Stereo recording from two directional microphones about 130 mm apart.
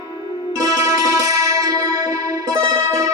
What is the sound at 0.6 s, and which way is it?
Music, 25° right (ahead or behind).